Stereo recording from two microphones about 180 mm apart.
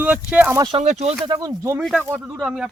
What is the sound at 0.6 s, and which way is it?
Speech, 35° right (ahead or behind).